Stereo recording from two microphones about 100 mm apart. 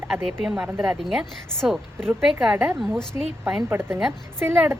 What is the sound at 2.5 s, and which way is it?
A woman's voice, 20° right (ahead or behind).